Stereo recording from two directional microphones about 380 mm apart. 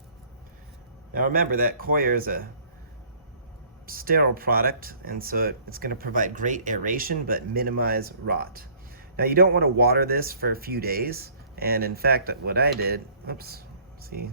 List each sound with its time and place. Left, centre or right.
1.1 s speech: right
3.8 s speech: right